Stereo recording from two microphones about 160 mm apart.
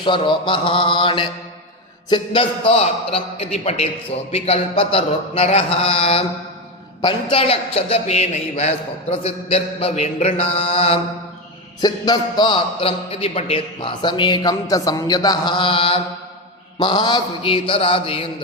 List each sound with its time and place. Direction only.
0.0 s a man's voice: 30° left (ahead or behind)
11.8 s a man's voice: 25° left (ahead or behind)